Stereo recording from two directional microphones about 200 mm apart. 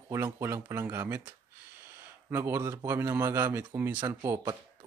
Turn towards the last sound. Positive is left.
turn(degrees=-15)  # may be behind; listen again after turning